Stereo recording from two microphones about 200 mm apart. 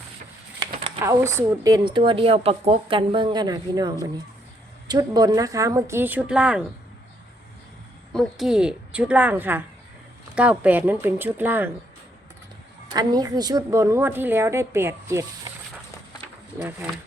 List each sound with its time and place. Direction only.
1.0 s a woman's voice: 15° right (ahead or behind)
8.1 s a woman's voice: centre (ahead or behind)
12.9 s a woman's voice: 20° right (ahead or behind)
16.6 s a woman's voice: 10° right (ahead or behind)